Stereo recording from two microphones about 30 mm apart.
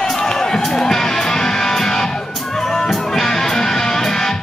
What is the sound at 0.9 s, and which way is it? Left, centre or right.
Music, centre.